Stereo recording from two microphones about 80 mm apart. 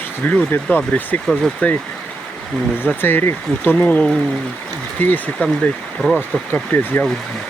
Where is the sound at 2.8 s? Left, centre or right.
Left.